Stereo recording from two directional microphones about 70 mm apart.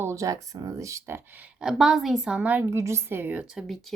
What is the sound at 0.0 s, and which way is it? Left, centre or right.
Speech, right.